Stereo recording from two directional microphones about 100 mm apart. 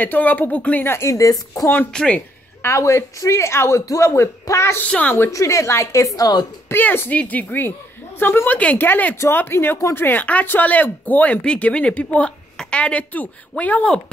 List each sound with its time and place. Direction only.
0.0 s speech: 15° left (ahead or behind); by 1.7 s 35° left (ahead or behind)
1.9 s speech: 10° left (ahead or behind)
2.6 s speech: 30° left (ahead or behind)
4.8 s speech: 15° left (ahead or behind)
5.1 s a woman's voice: 30° left (ahead or behind)
6.7 s speech: 20° left (ahead or behind)